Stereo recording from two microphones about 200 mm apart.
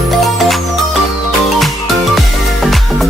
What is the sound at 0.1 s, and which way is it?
Music, centre (ahead or behind).